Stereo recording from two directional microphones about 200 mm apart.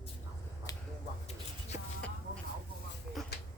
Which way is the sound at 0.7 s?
15° left (ahead or behind).